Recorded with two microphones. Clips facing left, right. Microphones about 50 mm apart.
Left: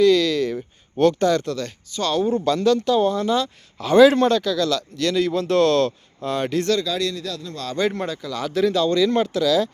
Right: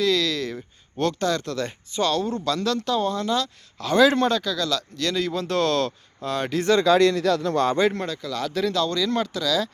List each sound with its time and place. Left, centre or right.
0.0 s a sound: centre
2.1 s speech: centre
6.8 s a man's voice: right
7.8 s speech: centre